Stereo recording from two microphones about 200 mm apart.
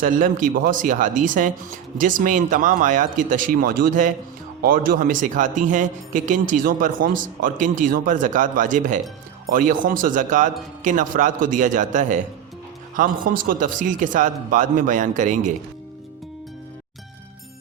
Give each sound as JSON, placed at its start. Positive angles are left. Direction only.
{"t": 0.0, "sound": "a man's voice", "side_deg": -40}